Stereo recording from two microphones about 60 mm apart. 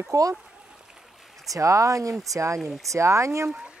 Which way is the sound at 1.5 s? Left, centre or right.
Right.